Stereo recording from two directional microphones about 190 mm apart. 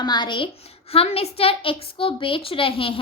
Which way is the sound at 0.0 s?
25° left (ahead or behind).